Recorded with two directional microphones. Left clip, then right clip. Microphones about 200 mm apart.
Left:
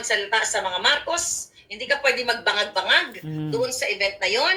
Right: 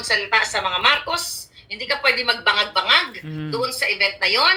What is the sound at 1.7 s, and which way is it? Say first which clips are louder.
Speech: right 2 dB; 15° right (ahead or behind).